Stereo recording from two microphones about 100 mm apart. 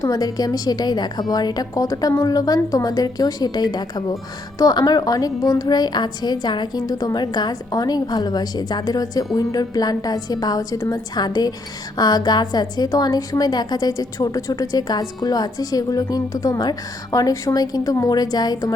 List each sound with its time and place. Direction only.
0.0 s a woman's voice: 40° left (ahead or behind)